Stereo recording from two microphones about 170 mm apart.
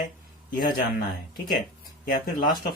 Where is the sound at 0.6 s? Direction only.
65° left (ahead or behind).